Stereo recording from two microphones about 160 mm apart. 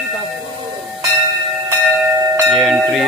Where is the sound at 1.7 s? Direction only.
15° right (ahead or behind).